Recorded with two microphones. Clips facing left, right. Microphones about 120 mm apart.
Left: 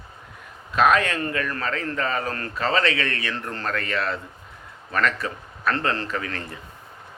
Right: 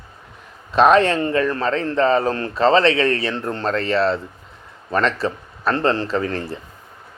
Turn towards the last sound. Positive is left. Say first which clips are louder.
# right 8 dB
turn(degrees=-30)  # may be behind; listen again after turning